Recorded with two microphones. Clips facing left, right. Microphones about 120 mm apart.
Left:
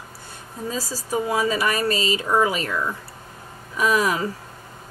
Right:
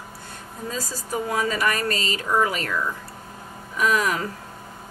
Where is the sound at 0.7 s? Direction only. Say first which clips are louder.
Left 3 dB; 15° left (ahead or behind).